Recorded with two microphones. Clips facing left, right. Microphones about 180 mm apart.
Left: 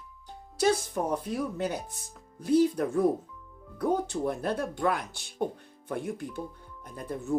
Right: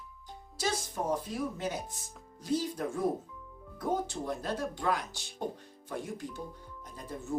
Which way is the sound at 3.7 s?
60° left (ahead or behind).